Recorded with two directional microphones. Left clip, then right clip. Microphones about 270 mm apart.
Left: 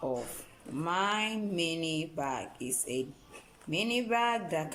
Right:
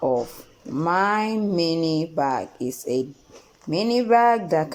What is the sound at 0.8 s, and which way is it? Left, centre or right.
Speech, centre.